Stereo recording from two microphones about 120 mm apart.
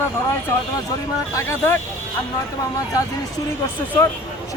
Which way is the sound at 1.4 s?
25° left (ahead or behind).